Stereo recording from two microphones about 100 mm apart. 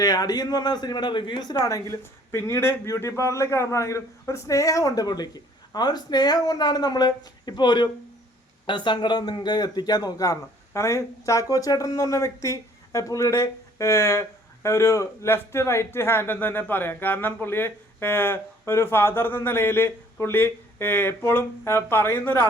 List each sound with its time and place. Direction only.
0.0 s a man's voice: 40° left (ahead or behind); by 22.4 s 20° left (ahead or behind)